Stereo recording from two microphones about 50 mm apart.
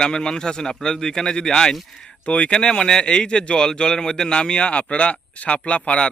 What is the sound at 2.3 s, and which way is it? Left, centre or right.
Speech, left.